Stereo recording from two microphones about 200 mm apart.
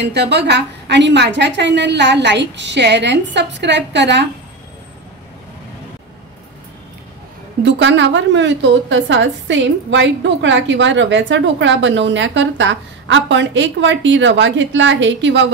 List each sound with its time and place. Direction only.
0.0 s a woman's voice: 55° right (ahead or behind)
7.6 s a woman's voice: 65° right (ahead or behind)